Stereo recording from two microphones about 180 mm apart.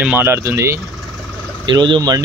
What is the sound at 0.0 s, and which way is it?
Speech, 10° right (ahead or behind).